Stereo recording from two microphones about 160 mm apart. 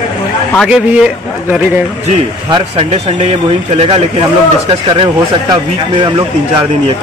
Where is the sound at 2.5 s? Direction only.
35° right (ahead or behind).